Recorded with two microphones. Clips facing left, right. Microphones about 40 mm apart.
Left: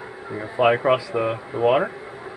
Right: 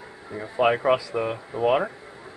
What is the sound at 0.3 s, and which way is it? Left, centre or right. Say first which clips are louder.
Speech: left 3 dB; centre.